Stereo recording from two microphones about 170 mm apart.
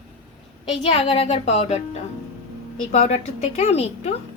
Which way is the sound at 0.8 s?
35° left (ahead or behind).